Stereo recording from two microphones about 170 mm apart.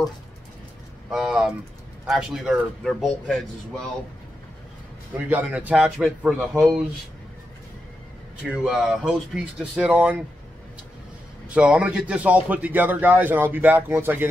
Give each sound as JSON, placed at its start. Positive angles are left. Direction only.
{"t": 1.1, "sound": "speech", "side_deg": -5}
{"t": 5.1, "sound": "a man's voice", "side_deg": -10}
{"t": 8.5, "sound": "a man's voice", "side_deg": -5}
{"t": 11.5, "sound": "a man's voice", "side_deg": -10}